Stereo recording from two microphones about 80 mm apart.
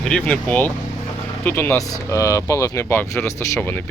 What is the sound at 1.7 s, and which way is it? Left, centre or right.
Speech, left.